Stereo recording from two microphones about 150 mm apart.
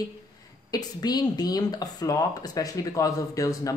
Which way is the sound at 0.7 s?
25° left (ahead or behind).